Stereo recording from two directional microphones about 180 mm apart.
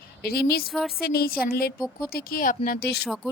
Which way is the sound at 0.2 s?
60° left (ahead or behind).